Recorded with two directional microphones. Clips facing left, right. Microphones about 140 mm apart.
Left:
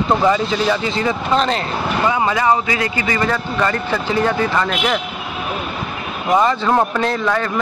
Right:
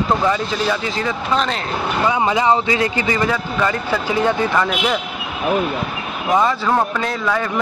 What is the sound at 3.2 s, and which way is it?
Speech, 10° right (ahead or behind).